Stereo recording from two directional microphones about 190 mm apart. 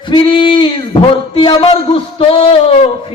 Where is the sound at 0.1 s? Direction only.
25° left (ahead or behind).